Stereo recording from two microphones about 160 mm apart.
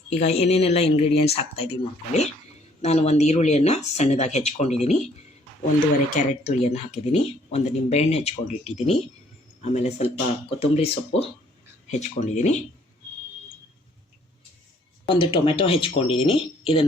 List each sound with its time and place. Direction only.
0.2 s speech: 45° left (ahead or behind)
6.1 s speech: 45° left (ahead or behind)
15.0 s speech: 30° left (ahead or behind)